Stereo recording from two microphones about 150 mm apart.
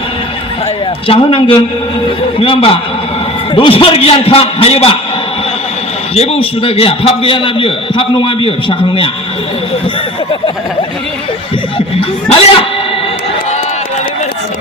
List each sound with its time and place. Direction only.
1.0 s a man's voice: 40° left (ahead or behind)
6.1 s a man's voice: 45° left (ahead or behind)
11.9 s a man's voice: 35° left (ahead or behind)